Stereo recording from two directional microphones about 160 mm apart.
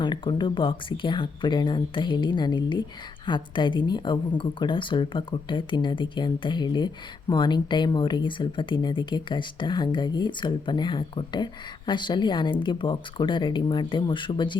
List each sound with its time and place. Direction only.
0.0 s speech: 30° left (ahead or behind)